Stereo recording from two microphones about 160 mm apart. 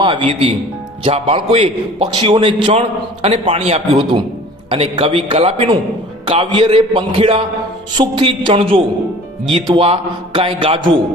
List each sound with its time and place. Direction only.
0.0 s a man's voice: 35° right (ahead or behind)